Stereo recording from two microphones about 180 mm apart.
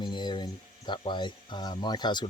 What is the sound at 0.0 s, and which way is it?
Speech, 25° left (ahead or behind).